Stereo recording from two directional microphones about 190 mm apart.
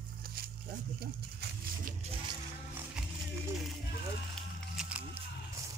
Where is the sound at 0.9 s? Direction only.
50° right (ahead or behind).